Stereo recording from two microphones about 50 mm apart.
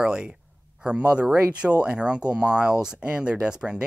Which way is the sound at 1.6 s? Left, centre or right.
Right.